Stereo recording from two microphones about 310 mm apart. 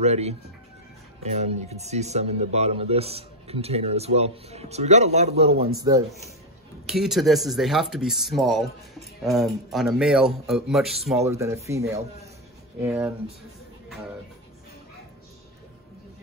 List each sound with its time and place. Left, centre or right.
0.0 s speech: right
6.9 s speech: centre
11.9 s speech: centre
12.8 s speech: centre